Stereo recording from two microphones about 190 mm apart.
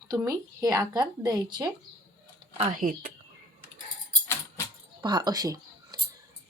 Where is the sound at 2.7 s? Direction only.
45° right (ahead or behind).